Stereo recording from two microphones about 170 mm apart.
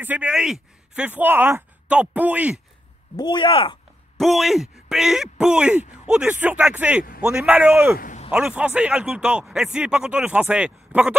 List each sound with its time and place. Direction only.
0.0 s speech: 10° right (ahead or behind)
3.2 s speech: 25° left (ahead or behind)
4.2 s a man's voice: centre (ahead or behind)
7.9 s a man's voice: 55° left (ahead or behind)
8.3 s a man's voice: 5° right (ahead or behind)